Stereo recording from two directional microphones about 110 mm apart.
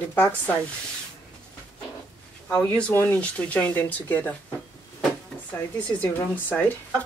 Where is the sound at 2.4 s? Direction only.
10° left (ahead or behind).